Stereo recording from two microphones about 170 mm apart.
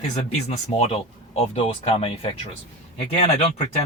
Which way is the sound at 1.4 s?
35° left (ahead or behind).